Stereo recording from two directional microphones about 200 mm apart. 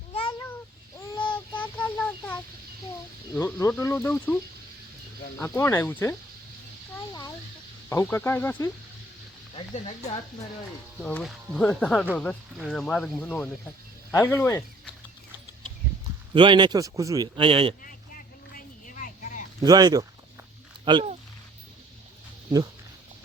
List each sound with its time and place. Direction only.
0.1 s a sound: 25° left (ahead or behind)
0.9 s a sound: 10° left (ahead or behind)
3.3 s speech: 10° left (ahead or behind)
7.9 s speech: 10° left (ahead or behind)
9.6 s speech: 30° left (ahead or behind)
11.0 s speech: 5° left (ahead or behind)
16.3 s a man's voice: 25° right (ahead or behind)
17.8 s vehicle: 45° left (ahead or behind)
19.6 s a man's voice: 20° right (ahead or behind)